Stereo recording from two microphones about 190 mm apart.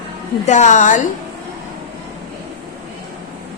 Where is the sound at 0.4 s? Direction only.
40° left (ahead or behind).